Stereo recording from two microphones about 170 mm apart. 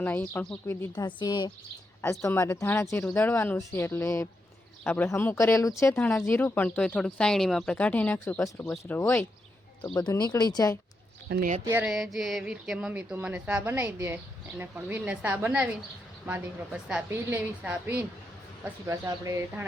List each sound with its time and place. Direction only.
0.0 s speech: 10° left (ahead or behind)
1.0 s speech: 25° left (ahead or behind)
9.8 s speech: 25° left (ahead or behind)
11.9 s a woman's voice: centre (ahead or behind); by 19.6 s 20° right (ahead or behind)